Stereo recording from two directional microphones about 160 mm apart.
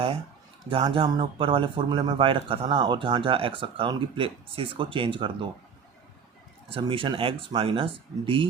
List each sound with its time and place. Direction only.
0.7 s speech: 35° right (ahead or behind)
6.7 s speech: 35° right (ahead or behind)